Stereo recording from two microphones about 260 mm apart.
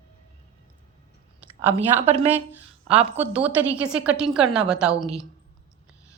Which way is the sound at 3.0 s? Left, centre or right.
Right.